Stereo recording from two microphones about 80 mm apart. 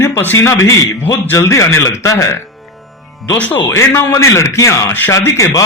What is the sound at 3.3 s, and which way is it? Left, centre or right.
A man's voice, left.